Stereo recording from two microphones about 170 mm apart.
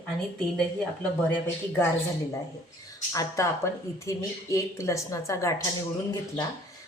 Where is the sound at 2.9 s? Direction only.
20° left (ahead or behind).